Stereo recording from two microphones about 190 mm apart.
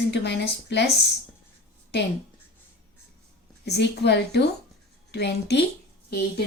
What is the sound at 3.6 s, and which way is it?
Speech, 60° left (ahead or behind).